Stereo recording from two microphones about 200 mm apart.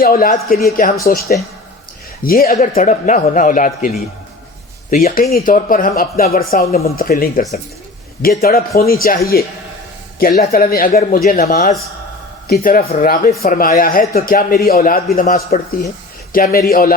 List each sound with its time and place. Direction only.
0.0 s a man's voice: 45° left (ahead or behind)